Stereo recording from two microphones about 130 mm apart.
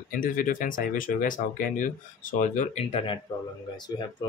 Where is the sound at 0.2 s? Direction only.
90° left; by 2.8 s 75° left (ahead or behind).